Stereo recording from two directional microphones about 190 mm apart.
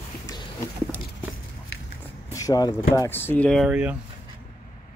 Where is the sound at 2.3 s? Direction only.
20° left (ahead or behind); by 4.0 s 5° right (ahead or behind).